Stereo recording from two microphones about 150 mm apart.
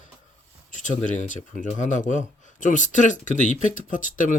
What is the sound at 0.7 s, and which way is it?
Speech, 55° left (ahead or behind).